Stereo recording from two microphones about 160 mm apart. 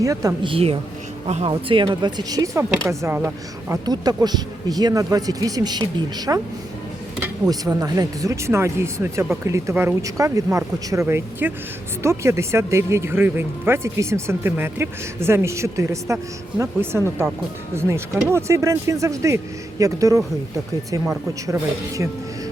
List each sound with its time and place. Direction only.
0.0 s speech: 20° right (ahead or behind)
0.5 s speech: 35° right (ahead or behind); by 3.8 s 10° right (ahead or behind)
3.8 s speech: 25° right (ahead or behind)
7.4 s speech: 20° right (ahead or behind)
21.4 s speech: 20° right (ahead or behind)